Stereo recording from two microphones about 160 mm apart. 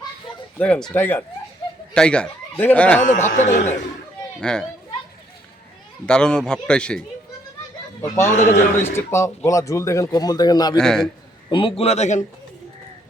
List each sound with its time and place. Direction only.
0.6 s speech: 5° left (ahead or behind)
3.0 s speech: 50° left (ahead or behind)
4.4 s a child's voice: 5° left (ahead or behind)
6.1 s speech: 5° left (ahead or behind)
8.3 s a man's voice: 55° left (ahead or behind)
8.8 s speech: 15° left (ahead or behind)
10.8 s speech: 5° left (ahead or behind)
11.4 s speech: 30° left (ahead or behind)